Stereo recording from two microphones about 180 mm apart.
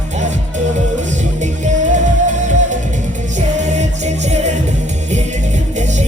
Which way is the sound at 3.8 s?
40° right (ahead or behind).